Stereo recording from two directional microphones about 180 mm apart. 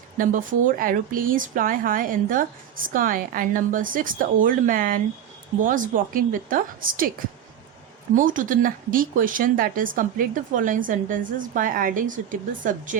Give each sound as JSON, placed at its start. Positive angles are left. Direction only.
{"t": 0.2, "sound": "speech", "side_deg": -50}
{"t": 8.1, "sound": "speech", "side_deg": -50}